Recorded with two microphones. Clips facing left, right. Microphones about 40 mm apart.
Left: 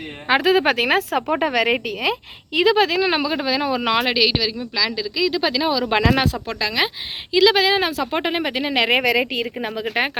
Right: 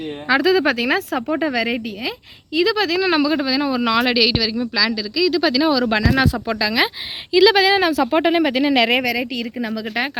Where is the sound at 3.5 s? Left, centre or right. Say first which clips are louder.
Right 1 dB; left.